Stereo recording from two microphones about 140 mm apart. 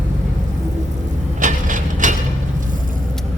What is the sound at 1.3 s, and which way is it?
Mechanisms, 65° right (ahead or behind).